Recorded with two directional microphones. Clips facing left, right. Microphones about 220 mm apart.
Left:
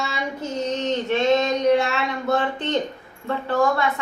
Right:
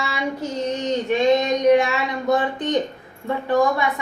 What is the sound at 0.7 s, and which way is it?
A woman's voice, 15° right (ahead or behind).